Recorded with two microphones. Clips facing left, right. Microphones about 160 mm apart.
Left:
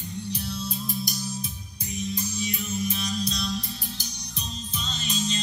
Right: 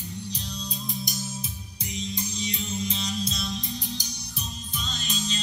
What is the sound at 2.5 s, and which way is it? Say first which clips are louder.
Music: left 2 dB; 25° right (ahead or behind).